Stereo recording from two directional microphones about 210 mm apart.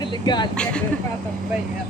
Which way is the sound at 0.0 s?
20° left (ahead or behind).